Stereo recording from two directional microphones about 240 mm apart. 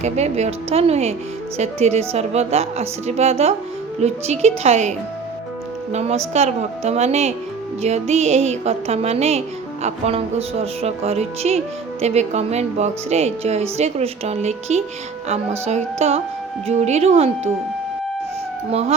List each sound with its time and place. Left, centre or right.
0.0 s music: right
18.7 s music: right